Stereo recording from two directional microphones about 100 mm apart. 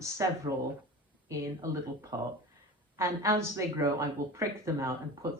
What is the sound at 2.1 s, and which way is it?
A woman's voice, 35° right (ahead or behind).